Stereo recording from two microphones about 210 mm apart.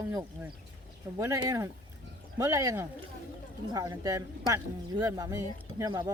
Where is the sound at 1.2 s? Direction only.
15° right (ahead or behind).